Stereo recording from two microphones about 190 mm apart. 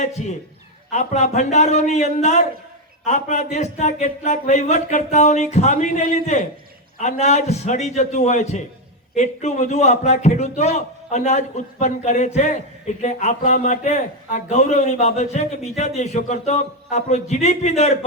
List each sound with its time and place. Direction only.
0.0 s speech: 35° left (ahead or behind)